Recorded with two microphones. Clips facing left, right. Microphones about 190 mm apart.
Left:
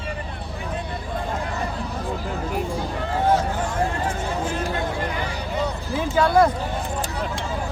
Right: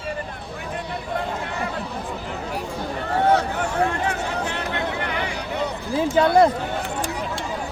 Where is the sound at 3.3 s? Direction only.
70° right (ahead or behind).